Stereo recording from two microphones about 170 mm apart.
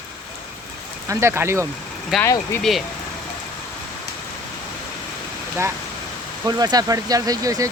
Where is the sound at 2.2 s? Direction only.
15° left (ahead or behind).